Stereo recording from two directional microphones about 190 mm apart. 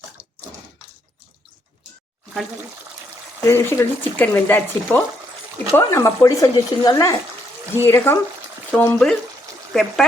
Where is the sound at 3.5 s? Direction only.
15° left (ahead or behind).